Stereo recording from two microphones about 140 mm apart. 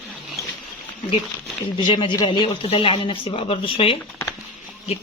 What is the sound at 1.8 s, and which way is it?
Speech, 35° left (ahead or behind).